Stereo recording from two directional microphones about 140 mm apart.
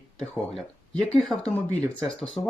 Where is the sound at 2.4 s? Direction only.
30° left (ahead or behind).